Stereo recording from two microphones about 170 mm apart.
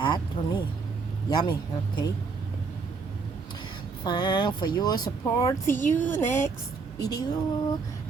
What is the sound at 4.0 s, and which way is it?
Speech, 25° left (ahead or behind).